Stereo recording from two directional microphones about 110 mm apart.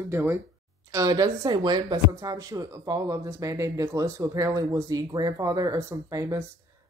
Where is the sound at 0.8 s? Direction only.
30° right (ahead or behind).